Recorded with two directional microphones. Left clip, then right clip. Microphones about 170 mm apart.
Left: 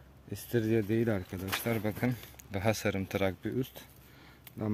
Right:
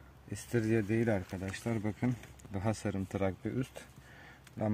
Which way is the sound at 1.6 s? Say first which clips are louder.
Left 2 dB; 15° left (ahead or behind).